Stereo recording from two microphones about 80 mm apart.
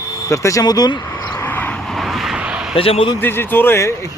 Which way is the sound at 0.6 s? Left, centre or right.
Left.